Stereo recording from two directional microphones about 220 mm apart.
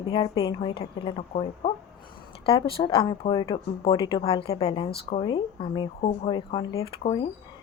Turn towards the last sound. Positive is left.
turn(degrees=20)  # may be behind; listen again after turning